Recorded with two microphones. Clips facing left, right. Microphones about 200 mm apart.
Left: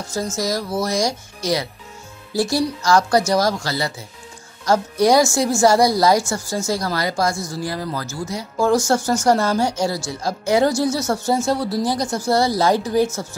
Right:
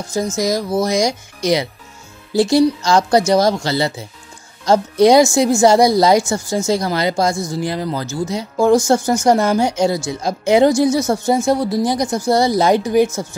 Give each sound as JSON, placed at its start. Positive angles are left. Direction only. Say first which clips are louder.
{"t": 0.1, "sound": "a woman's voice", "louder": "right 5 dB", "side_deg": -15}